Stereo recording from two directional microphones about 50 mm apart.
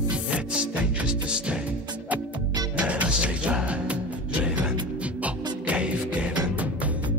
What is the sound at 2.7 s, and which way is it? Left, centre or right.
Music, right.